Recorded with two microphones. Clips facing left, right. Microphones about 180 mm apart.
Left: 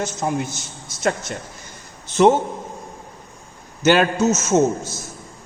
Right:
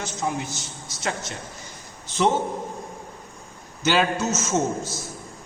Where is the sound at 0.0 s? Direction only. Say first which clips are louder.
Left 5 dB; 50° left (ahead or behind).